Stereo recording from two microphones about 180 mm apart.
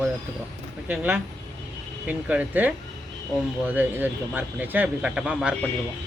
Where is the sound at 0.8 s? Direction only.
10° right (ahead or behind).